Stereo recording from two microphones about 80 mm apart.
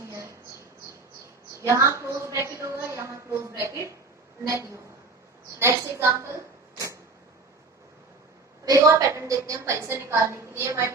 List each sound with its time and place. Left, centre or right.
1.6 s a sound: right
4.4 s a woman's voice: right
8.6 s a woman's voice: right